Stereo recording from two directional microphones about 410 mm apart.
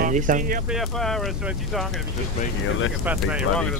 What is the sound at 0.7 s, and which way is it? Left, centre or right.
Speech, centre.